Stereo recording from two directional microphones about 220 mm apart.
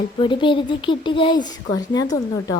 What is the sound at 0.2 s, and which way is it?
A woman's voice, 20° left (ahead or behind).